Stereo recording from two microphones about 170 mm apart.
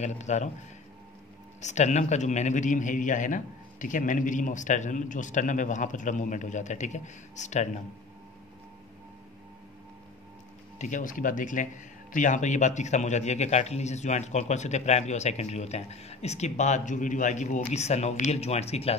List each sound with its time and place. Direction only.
0.0 s a man's voice: 45° left (ahead or behind)
1.6 s a man's voice: 45° left (ahead or behind)
10.8 s a man's voice: 50° left (ahead or behind)